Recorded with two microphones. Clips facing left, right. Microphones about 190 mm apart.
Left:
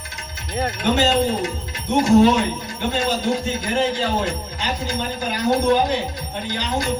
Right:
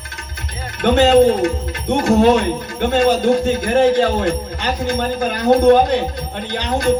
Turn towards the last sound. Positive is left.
turn(degrees=-55)  # may be behind; listen again after turning